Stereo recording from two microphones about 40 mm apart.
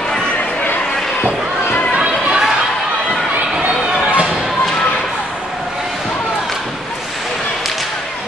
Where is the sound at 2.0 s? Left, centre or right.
Right.